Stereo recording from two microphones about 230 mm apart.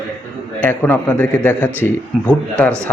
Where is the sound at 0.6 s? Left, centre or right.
Centre.